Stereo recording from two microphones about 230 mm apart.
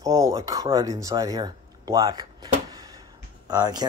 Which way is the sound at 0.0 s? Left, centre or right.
Centre.